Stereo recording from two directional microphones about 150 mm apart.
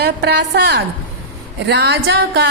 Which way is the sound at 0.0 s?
90° right.